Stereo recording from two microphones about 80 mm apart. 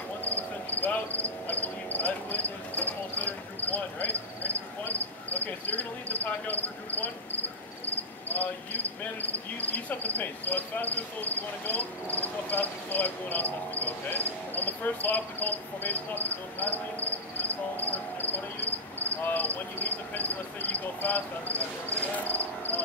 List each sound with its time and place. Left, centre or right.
0.2 s cricket: left